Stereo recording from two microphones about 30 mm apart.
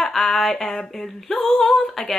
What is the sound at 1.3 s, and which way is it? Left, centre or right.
Speech, left.